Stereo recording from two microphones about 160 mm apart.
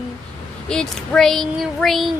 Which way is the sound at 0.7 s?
5° left (ahead or behind).